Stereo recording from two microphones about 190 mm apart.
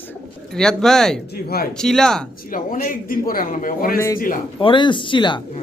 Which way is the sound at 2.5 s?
45° left (ahead or behind).